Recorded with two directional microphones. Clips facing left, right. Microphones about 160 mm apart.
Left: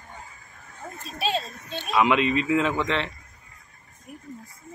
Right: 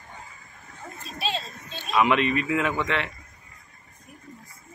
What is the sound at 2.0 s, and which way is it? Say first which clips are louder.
Speech: left 1 dB; 20° left (ahead or behind).